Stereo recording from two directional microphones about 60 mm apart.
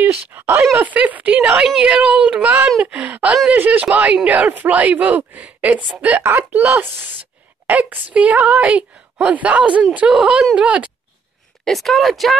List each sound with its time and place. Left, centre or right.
0.1 s speech: right
0.8 s a woman's voice: right
11.6 s speech: centre